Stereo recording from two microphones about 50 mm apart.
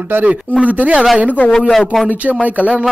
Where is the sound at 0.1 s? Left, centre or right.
Right.